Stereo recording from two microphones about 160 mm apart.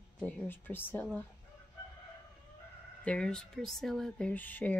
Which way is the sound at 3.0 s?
5° left (ahead or behind).